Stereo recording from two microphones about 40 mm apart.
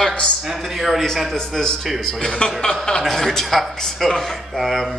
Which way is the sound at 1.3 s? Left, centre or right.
Centre.